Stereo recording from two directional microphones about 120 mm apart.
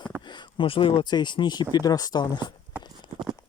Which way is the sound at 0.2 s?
40° left (ahead or behind).